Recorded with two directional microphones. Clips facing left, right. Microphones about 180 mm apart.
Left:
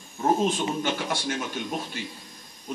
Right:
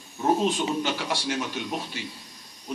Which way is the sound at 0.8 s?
50° left (ahead or behind).